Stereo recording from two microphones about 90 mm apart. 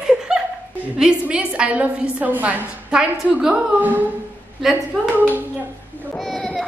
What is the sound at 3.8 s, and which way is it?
A woman's voice, 20° right (ahead or behind).